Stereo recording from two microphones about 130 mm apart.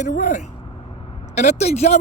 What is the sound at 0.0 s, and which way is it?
Speech, 70° left (ahead or behind).